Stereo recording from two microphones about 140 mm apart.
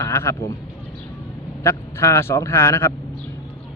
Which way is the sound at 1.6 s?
20° left (ahead or behind).